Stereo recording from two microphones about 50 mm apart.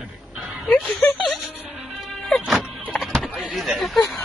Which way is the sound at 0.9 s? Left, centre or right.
Left.